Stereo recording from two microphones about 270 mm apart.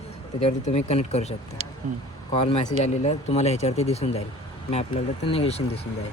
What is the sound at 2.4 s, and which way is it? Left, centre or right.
Speech, left.